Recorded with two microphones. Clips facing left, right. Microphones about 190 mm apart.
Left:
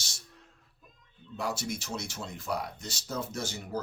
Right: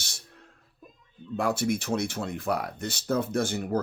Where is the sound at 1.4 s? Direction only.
55° right (ahead or behind).